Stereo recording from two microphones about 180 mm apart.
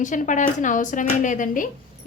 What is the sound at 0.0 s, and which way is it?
A woman's voice, 45° left (ahead or behind).